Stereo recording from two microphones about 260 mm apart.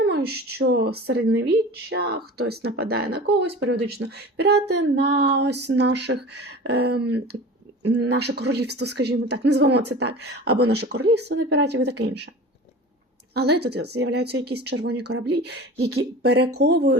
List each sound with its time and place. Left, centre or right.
0.0 s a woman's voice: right
13.3 s a woman's voice: right